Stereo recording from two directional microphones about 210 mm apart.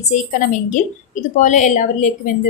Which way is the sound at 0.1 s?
35° left (ahead or behind).